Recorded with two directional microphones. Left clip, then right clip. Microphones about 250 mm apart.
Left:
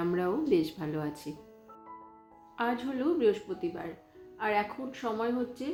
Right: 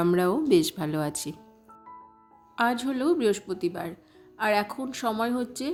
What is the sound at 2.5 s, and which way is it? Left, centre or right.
Speech, right.